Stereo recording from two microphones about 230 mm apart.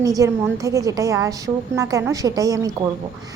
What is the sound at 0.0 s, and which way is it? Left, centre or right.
A woman's voice, centre.